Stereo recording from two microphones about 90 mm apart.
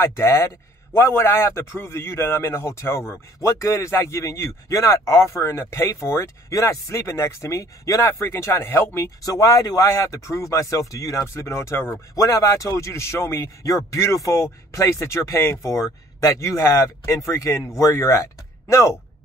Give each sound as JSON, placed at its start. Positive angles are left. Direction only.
{"t": 0.0, "sound": "speech", "side_deg": 30}
{"t": 9.2, "sound": "speech", "side_deg": 40}